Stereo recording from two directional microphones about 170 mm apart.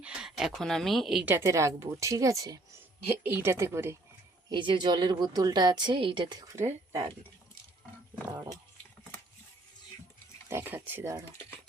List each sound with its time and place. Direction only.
0.0 s a woman's voice: 5° right (ahead or behind)
4.4 s a woman's voice: 30° right (ahead or behind)
6.6 s speech: 15° right (ahead or behind)
10.5 s a woman's voice: 10° right (ahead or behind)